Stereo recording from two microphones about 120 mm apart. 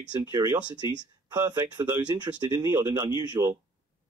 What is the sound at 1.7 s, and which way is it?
Speech, 35° right (ahead or behind).